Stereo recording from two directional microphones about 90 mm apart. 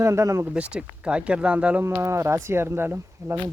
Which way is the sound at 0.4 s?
15° right (ahead or behind).